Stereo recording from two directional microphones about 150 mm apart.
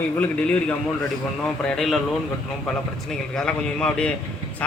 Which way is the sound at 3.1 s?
5° left (ahead or behind).